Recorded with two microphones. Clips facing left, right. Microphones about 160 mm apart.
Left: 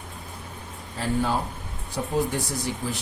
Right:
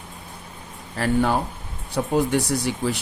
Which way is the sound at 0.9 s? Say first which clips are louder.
Right 4 dB; 70° right (ahead or behind).